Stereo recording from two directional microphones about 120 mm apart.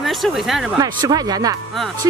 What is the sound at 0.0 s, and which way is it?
Speech, centre (ahead or behind).